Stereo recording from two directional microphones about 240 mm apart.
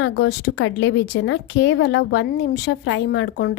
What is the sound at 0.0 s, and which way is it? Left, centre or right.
Speech, left.